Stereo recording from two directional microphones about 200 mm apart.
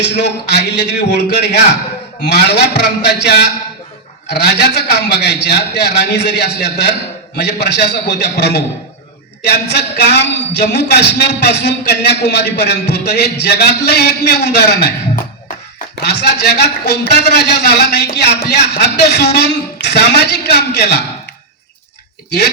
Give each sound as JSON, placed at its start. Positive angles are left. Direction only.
{"t": 0.0, "sound": "a man's voice", "side_deg": 60}